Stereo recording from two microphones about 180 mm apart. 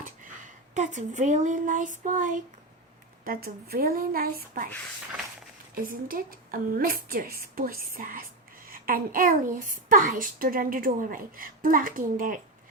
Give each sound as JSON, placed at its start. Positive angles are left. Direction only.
{"t": 0.7, "sound": "a child's voice", "side_deg": -40}
{"t": 3.2, "sound": "a woman's voice", "side_deg": -55}
{"t": 5.7, "sound": "a child's voice", "side_deg": -50}